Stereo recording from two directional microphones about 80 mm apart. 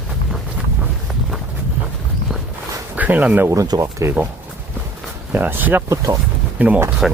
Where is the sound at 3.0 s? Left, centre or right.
Centre.